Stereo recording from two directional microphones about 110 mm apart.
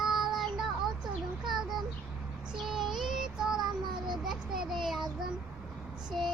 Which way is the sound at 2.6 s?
5° right (ahead or behind).